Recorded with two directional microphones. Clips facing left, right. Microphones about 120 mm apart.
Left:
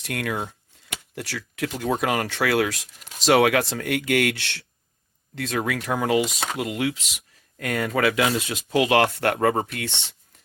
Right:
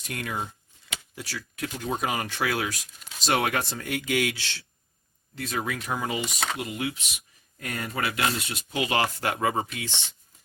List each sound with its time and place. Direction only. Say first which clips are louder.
0.0 s speech: left 5 dB; 70° left (ahead or behind)
6.6 s speech: left 6 dB; 90° left; by 10.2 s 60° left (ahead or behind)